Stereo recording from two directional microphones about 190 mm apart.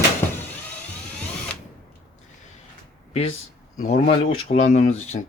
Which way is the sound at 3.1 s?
35° left (ahead or behind).